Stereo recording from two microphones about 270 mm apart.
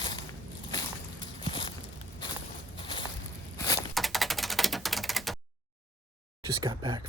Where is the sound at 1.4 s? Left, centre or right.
Centre.